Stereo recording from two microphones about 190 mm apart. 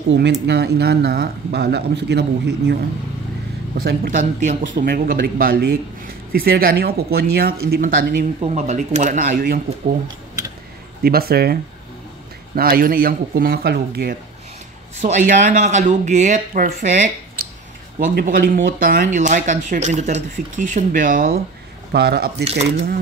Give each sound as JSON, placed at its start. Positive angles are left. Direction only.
{"t": 0.1, "sound": "a man's voice", "side_deg": -60}
{"t": 8.4, "sound": "speech", "side_deg": -35}
{"t": 11.0, "sound": "a man's voice", "side_deg": -55}
{"t": 12.5, "sound": "a man's voice", "side_deg": -50}
{"t": 15.0, "sound": "a man's voice", "side_deg": -40}
{"t": 21.9, "sound": "speech", "side_deg": -60}